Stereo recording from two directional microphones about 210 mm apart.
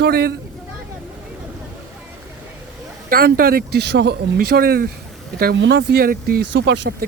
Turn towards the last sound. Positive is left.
turn(degrees=-55)  # may be behind; listen again after turning